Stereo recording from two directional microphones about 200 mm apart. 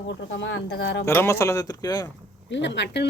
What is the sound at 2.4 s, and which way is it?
Speech, 65° left (ahead or behind).